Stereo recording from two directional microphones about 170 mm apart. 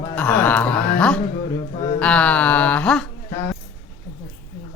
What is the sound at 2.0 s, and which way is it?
Music, 5° left (ahead or behind).